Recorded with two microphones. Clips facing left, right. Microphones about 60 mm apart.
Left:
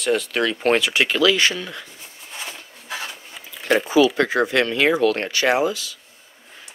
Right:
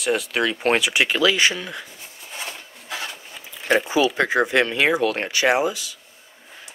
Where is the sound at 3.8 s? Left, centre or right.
Right.